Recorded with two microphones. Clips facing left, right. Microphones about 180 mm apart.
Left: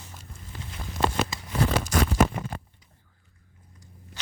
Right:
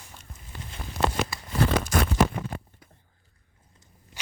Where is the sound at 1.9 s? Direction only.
55° right (ahead or behind).